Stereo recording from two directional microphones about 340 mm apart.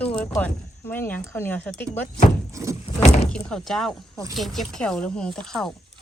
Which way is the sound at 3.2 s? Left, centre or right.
Centre.